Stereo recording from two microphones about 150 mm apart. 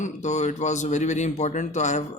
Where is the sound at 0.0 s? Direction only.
50° left (ahead or behind).